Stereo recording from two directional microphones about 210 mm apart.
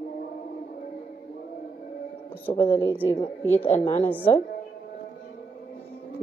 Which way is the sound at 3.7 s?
30° left (ahead or behind).